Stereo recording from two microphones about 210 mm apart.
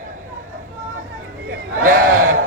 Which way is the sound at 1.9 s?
40° right (ahead or behind).